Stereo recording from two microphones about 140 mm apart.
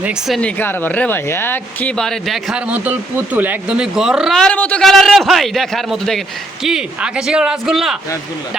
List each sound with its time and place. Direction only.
0.0 s speech: 5° right (ahead or behind)
0.3 s speech: 10° left (ahead or behind)